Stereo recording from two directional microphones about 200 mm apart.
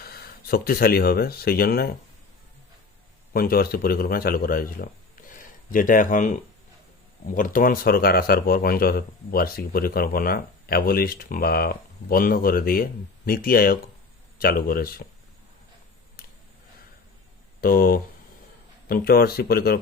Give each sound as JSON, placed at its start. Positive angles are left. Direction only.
{"t": 0.0, "sound": "speech", "side_deg": 50}
{"t": 3.3, "sound": "speech", "side_deg": 50}
{"t": 17.6, "sound": "speech", "side_deg": 45}